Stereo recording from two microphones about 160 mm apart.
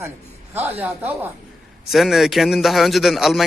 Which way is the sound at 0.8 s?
10° right (ahead or behind).